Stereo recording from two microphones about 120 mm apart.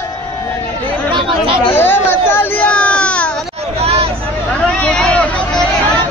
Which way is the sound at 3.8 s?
55° right (ahead or behind).